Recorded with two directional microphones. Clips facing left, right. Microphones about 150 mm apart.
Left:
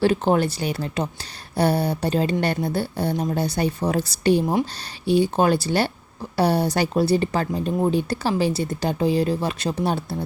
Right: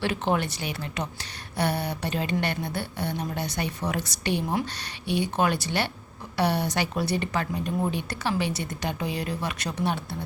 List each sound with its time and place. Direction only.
0.0 s speech: 35° left (ahead or behind)